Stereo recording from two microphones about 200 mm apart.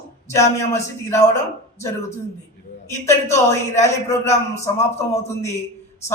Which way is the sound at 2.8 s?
15° left (ahead or behind).